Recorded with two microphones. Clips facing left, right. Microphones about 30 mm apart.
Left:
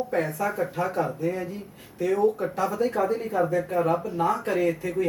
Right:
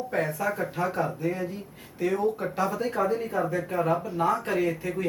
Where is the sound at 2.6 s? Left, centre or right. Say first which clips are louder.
Left 3 dB; centre.